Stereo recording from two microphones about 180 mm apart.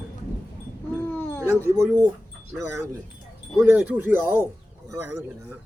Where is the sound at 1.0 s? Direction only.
10° left (ahead or behind).